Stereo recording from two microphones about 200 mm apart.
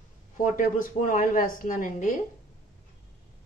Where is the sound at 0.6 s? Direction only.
45° left (ahead or behind).